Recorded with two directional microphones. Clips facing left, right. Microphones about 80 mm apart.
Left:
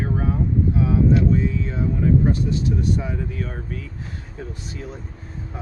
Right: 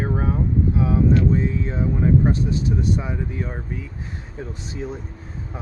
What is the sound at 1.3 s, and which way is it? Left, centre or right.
Speech, right.